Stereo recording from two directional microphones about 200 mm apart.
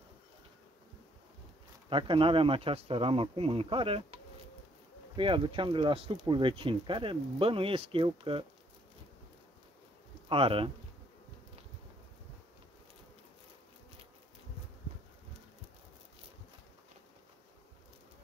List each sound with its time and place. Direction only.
1.9 s speech: 25° right (ahead or behind)
10.2 s speech: 25° right (ahead or behind)